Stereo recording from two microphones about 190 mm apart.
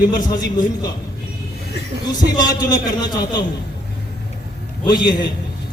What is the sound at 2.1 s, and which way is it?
Speech, 20° left (ahead or behind).